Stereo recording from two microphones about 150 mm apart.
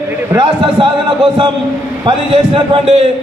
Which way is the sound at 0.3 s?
35° right (ahead or behind).